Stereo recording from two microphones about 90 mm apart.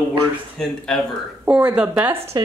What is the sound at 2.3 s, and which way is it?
Speech, 50° right (ahead or behind).